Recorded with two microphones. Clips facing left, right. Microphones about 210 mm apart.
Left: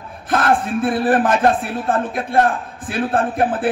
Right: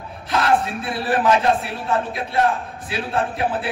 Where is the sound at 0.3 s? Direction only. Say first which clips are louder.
Left 2 dB; 50° left (ahead or behind).